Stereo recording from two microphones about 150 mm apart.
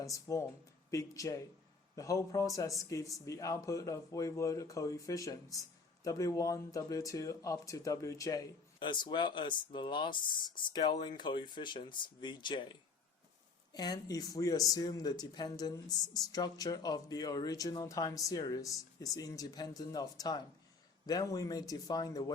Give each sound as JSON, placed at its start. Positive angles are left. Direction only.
{"t": 0.0, "sound": "speech", "side_deg": 20}
{"t": 13.7, "sound": "speech", "side_deg": 25}